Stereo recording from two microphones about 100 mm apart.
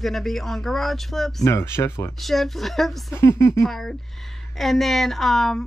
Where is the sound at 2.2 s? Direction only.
Centre (ahead or behind).